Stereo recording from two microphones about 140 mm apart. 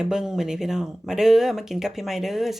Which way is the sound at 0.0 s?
5° right (ahead or behind).